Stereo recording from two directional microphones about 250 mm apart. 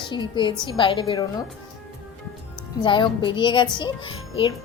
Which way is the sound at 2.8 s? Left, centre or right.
Centre.